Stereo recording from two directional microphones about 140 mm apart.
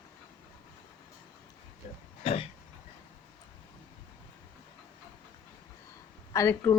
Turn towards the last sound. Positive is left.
turn(degrees=20)  # may be behind; listen again after turning